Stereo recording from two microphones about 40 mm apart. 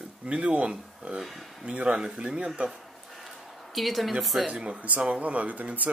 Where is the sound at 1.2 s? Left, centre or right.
Centre.